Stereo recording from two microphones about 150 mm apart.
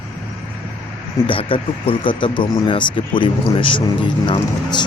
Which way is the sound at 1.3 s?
35° left (ahead or behind).